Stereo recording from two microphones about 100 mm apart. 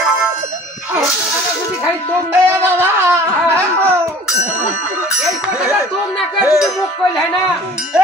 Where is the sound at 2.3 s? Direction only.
25° right (ahead or behind).